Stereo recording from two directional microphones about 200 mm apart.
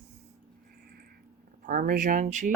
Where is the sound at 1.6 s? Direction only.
45° right (ahead or behind).